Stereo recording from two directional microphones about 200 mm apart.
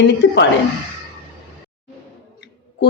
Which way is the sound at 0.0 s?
60° left (ahead or behind).